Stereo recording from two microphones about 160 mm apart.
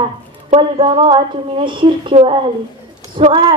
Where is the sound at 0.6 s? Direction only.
35° right (ahead or behind).